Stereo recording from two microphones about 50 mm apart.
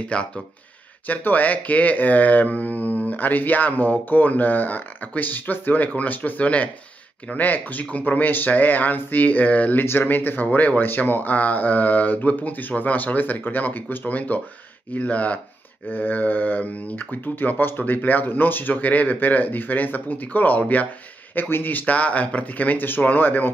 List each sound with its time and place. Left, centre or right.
0.1 s speech: left